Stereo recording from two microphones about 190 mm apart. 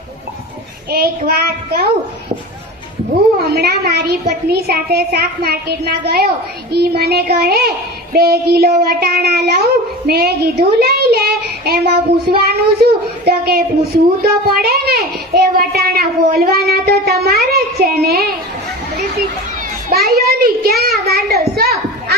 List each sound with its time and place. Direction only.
0.9 s speech: 50° right (ahead or behind)
3.4 s a woman's voice: 55° right (ahead or behind)
11.6 s child singing: 55° right (ahead or behind)
12.3 s speech: 55° right (ahead or behind)
19.9 s speech: 55° right (ahead or behind)